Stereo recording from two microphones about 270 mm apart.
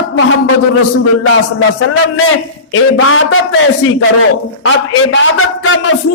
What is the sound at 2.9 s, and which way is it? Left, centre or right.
A man's voice, left.